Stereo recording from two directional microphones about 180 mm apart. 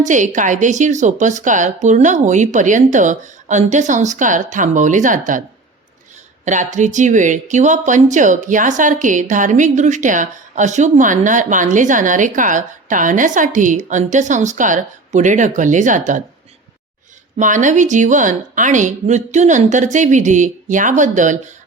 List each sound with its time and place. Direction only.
0.0 s speech: 45° right (ahead or behind)
6.4 s speech: 40° right (ahead or behind)
17.3 s speech: 45° right (ahead or behind)